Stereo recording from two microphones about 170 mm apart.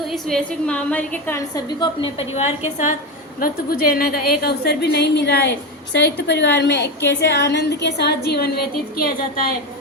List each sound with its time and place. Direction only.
0.1 s a woman's voice: 5° left (ahead or behind)
1.8 s a woman's voice: 30° left (ahead or behind)
3.4 s a woman's voice: 60° left (ahead or behind)